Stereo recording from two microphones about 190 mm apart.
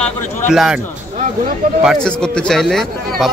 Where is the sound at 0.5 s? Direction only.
Centre (ahead or behind).